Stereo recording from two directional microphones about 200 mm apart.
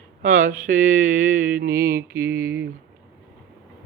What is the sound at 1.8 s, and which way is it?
Mantra, 50° right (ahead or behind).